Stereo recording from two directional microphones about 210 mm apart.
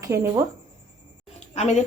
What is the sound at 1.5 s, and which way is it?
Speech, 35° left (ahead or behind).